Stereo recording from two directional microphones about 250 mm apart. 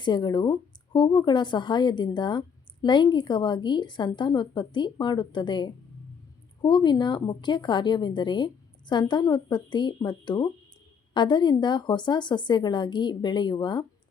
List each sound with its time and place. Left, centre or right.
0.0 s a woman's voice: centre